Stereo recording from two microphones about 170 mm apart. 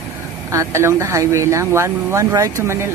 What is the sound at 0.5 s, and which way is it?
Speech, 15° right (ahead or behind).